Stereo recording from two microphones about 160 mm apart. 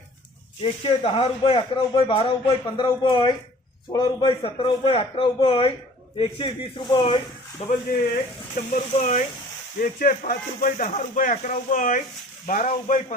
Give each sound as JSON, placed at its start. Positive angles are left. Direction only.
{"t": 0.6, "sound": "speech", "side_deg": 35}
{"t": 7.6, "sound": "speech", "side_deg": 40}
{"t": 9.8, "sound": "speech", "side_deg": 60}